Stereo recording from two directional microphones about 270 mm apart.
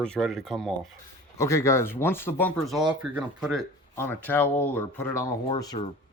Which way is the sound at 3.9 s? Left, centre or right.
Centre.